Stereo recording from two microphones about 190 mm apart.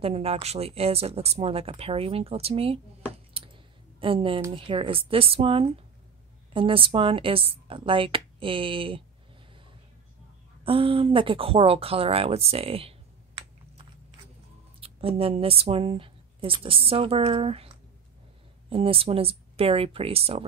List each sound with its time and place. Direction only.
0.0 s speech: 30° right (ahead or behind)
3.4 s a sound: 30° right (ahead or behind)
4.0 s speech: 30° right (ahead or behind)
10.6 s speech: 30° right (ahead or behind)
14.8 s speech: 30° right (ahead or behind)
18.7 s speech: 30° right (ahead or behind)